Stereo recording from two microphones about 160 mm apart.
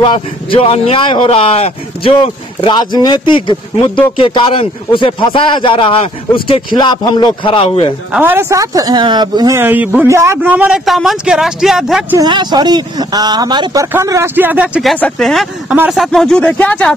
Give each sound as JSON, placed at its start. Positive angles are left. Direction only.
{"t": 0.0, "sound": "speech", "side_deg": 35}
{"t": 8.1, "sound": "speech", "side_deg": -10}
{"t": 9.6, "sound": "a man's voice", "side_deg": -10}
{"t": 12.2, "sound": "a man's voice", "side_deg": -30}